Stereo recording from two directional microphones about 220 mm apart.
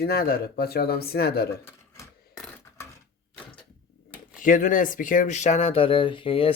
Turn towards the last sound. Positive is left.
turn(degrees=25)  # may be behind; listen again after turning